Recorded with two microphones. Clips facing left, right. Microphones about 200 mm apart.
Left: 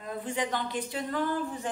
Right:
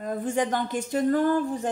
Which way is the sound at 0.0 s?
45° right (ahead or behind).